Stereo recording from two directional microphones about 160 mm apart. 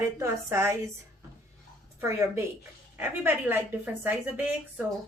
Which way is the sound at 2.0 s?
15° right (ahead or behind).